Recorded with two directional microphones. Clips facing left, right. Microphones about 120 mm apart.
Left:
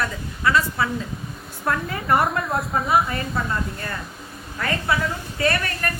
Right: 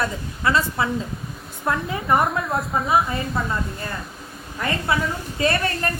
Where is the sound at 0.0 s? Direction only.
25° right (ahead or behind).